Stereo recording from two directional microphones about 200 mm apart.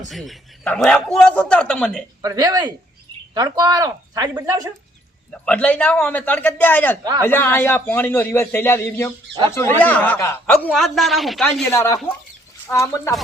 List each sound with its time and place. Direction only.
0.1 s a man's voice: centre (ahead or behind)
2.2 s speech: 20° right (ahead or behind)
5.3 s speech: 5° left (ahead or behind)
7.0 s speech: 20° right (ahead or behind)
7.3 s speech: 10° left (ahead or behind)
11.7 s speech: 15° left (ahead or behind)